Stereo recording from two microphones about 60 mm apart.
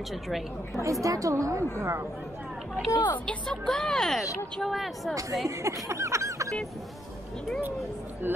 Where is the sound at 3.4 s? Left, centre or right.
Centre.